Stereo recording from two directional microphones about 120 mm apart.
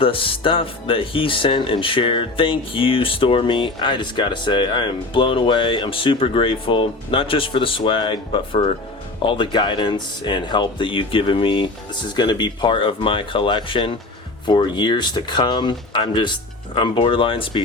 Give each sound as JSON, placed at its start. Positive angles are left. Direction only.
{"t": 0.0, "sound": "speech", "side_deg": 45}